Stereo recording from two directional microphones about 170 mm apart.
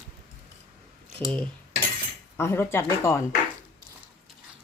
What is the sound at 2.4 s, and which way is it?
Speech, 15° left (ahead or behind).